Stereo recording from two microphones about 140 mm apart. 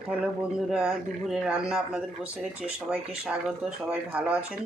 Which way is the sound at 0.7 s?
5° right (ahead or behind).